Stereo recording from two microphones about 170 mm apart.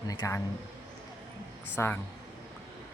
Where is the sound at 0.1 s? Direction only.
15° left (ahead or behind).